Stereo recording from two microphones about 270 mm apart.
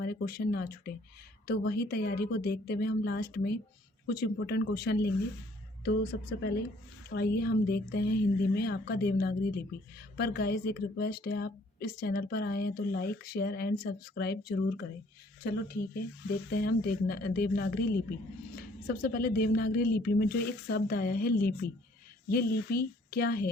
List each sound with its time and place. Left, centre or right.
0.0 s a woman's voice: left
18.9 s a woman's voice: left